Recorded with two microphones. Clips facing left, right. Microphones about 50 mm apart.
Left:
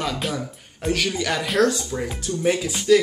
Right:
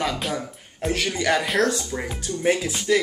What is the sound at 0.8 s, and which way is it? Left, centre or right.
Speech, centre.